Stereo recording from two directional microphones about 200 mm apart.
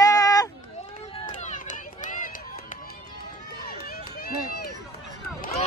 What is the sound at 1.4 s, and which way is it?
Run, 40° left (ahead or behind).